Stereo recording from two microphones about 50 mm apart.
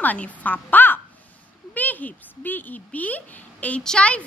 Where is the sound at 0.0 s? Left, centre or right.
Left.